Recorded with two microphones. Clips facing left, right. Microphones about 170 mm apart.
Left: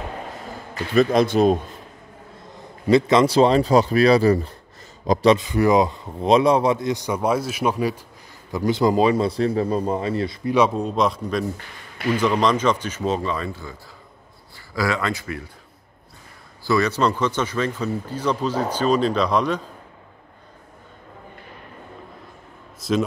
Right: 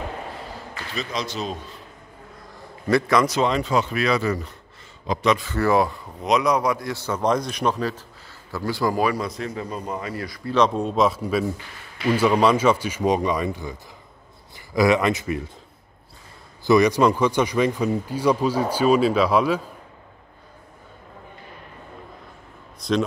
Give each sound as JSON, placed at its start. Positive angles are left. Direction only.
{"t": 0.9, "sound": "a man's voice", "side_deg": 55}
{"t": 2.5, "sound": "a man's voice", "side_deg": 20}
{"t": 5.4, "sound": "a man's voice", "side_deg": 15}
{"t": 10.5, "sound": "a man's voice", "side_deg": 5}
{"t": 16.6, "sound": "speech", "side_deg": -15}
{"t": 22.8, "sound": "a man's voice", "side_deg": 5}